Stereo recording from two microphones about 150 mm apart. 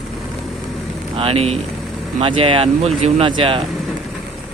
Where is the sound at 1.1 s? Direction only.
40° right (ahead or behind).